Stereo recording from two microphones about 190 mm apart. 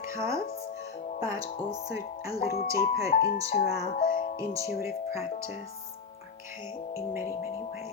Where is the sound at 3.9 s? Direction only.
50° left (ahead or behind).